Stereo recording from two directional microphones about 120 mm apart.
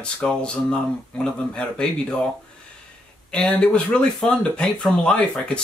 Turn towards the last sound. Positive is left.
turn(degrees=10)  # may be behind; listen again after turning